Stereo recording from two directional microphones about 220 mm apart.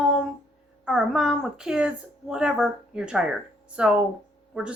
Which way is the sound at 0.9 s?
5° right (ahead or behind).